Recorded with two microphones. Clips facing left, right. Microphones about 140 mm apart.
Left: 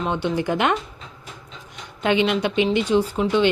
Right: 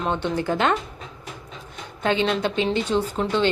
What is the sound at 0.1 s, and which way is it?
Speech, 15° left (ahead or behind).